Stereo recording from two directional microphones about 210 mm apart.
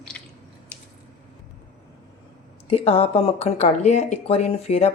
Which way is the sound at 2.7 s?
30° left (ahead or behind).